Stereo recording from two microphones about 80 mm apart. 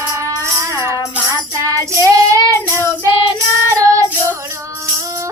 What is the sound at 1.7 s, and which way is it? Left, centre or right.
Child singing, right.